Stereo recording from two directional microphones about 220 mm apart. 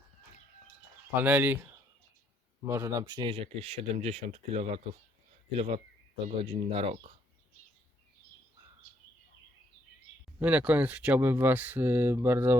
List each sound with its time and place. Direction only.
1.1 s speech: 10° right (ahead or behind)
2.6 s speech: 10° right (ahead or behind)
10.4 s speech: 5° right (ahead or behind)